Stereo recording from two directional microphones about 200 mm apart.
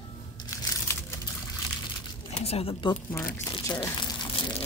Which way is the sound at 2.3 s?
30° left (ahead or behind).